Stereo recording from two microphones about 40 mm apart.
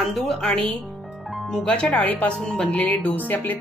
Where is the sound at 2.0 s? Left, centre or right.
Left.